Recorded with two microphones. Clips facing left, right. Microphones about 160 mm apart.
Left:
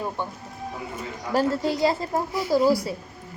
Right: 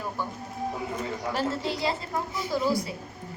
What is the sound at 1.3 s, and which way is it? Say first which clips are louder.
A woman's voice: left 8 dB; 45° left (ahead or behind).